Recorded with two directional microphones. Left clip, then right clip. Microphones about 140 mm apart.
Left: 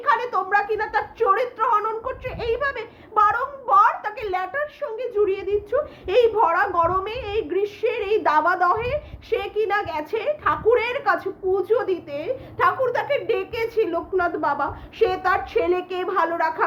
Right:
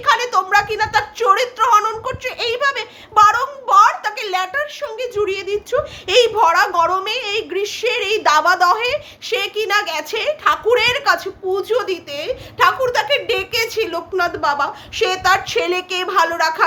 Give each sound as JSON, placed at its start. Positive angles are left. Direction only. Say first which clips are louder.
{"t": 0.0, "sound": "a woman's voice", "louder": "right 5 dB", "side_deg": -15}